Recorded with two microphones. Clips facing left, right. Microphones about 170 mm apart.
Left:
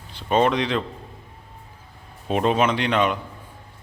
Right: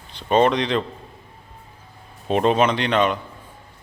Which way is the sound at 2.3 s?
5° left (ahead or behind).